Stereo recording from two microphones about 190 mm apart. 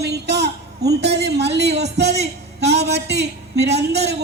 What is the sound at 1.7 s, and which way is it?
Speech, 35° right (ahead or behind).